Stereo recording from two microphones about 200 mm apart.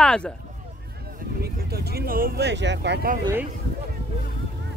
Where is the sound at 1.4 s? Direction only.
50° right (ahead or behind).